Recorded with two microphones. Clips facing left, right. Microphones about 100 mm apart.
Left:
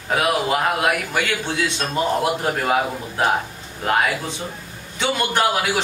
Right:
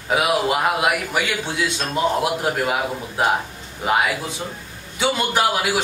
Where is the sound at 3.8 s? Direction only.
5° right (ahead or behind).